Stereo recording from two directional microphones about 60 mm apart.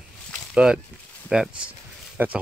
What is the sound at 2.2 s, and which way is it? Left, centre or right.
Speech, right.